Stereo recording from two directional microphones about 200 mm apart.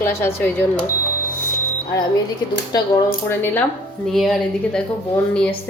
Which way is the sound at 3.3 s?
10° left (ahead or behind).